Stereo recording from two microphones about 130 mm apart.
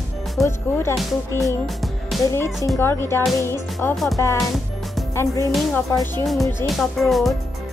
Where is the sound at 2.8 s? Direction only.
20° left (ahead or behind).